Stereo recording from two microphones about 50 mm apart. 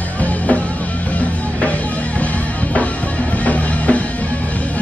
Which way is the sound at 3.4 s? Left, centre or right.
Left.